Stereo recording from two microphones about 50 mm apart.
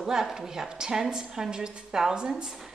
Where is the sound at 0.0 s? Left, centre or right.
Centre.